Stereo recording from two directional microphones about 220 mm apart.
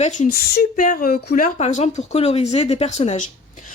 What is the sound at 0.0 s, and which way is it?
Speech, 35° left (ahead or behind).